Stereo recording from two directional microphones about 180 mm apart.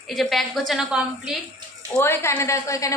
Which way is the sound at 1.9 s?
15° left (ahead or behind).